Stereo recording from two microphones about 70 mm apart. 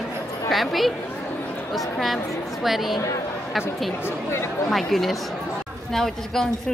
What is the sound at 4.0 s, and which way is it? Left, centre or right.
Speech, left.